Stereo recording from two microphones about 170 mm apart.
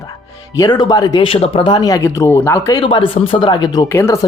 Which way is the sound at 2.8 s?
30° left (ahead or behind).